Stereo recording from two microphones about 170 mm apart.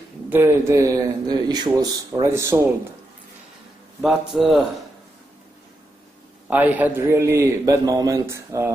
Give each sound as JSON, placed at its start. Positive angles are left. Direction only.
{"t": 0.3, "sound": "a man's voice", "side_deg": -15}
{"t": 4.0, "sound": "a man's voice", "side_deg": 0}
{"t": 6.5, "sound": "a man's voice", "side_deg": -10}